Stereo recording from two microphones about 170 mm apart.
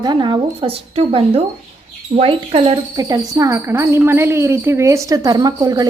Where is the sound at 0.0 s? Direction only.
25° right (ahead or behind).